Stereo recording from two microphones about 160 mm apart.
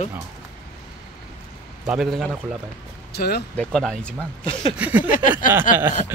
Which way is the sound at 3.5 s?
Centre (ahead or behind).